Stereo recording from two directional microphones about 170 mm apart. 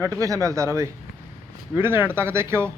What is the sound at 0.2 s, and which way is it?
Speech, 20° right (ahead or behind).